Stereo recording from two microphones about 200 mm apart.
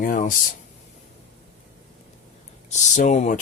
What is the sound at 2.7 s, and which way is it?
Speech, 35° left (ahead or behind).